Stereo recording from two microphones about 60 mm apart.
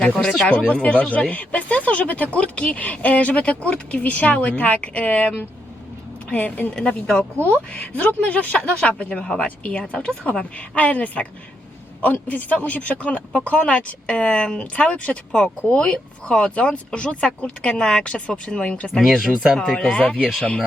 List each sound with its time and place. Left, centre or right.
0.4 s speech: left
6.7 s speech: centre
7.3 s speech: right
7.7 s speech: left
18.9 s speech: centre